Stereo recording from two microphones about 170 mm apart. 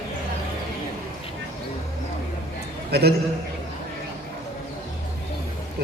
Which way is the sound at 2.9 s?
75° right (ahead or behind).